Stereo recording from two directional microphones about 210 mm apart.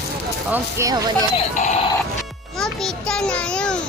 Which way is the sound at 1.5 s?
35° left (ahead or behind).